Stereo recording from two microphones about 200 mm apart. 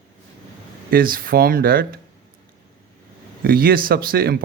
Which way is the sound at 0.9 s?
45° right (ahead or behind).